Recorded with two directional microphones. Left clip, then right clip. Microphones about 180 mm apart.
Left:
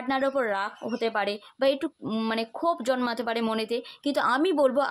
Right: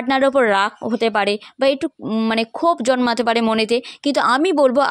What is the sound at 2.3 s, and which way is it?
A woman's voice, 45° right (ahead or behind).